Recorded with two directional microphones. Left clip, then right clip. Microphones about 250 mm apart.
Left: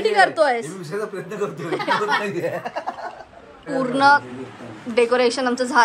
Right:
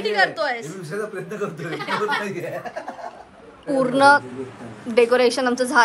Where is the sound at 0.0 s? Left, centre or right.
Centre.